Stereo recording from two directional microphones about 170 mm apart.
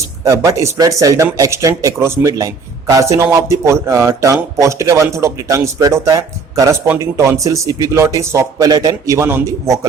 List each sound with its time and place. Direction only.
0.3 s a man's voice: 20° right (ahead or behind)